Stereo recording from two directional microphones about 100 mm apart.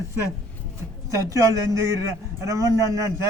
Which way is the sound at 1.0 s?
30° right (ahead or behind).